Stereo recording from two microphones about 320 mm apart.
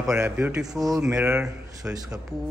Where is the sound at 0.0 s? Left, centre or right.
Centre.